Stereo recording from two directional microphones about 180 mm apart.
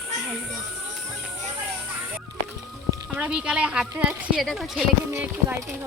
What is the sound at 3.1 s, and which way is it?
Speech, 5° right (ahead or behind).